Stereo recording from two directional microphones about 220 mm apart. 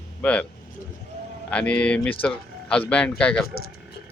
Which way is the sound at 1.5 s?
5° left (ahead or behind).